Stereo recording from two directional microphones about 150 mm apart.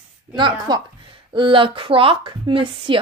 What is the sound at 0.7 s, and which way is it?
Speech, 35° right (ahead or behind).